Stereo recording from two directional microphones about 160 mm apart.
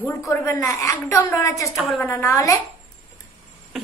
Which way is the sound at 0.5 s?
20° left (ahead or behind).